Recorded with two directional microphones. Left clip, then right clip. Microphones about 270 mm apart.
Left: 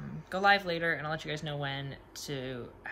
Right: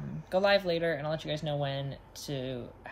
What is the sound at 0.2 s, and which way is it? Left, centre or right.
Speech, centre.